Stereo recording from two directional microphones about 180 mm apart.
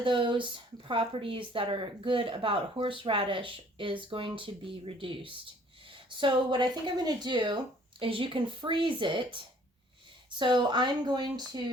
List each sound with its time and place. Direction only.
0.0 s speech: 30° right (ahead or behind)